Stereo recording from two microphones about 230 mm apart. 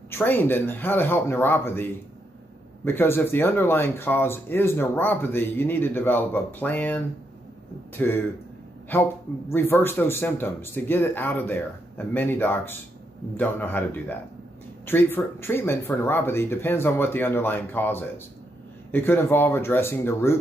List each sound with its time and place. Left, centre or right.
0.1 s speech: centre